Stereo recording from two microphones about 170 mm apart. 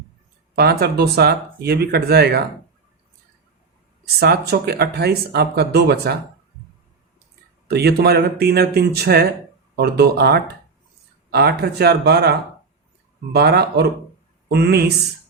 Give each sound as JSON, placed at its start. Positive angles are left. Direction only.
{"t": 0.5, "sound": "speech", "side_deg": -70}
{"t": 4.2, "sound": "speech", "side_deg": -70}
{"t": 7.7, "sound": "speech", "side_deg": -70}